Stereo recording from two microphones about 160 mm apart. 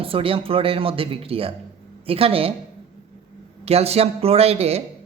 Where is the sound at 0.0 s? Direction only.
35° right (ahead or behind).